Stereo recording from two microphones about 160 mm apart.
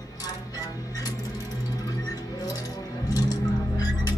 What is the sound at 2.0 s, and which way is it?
Music, 25° left (ahead or behind).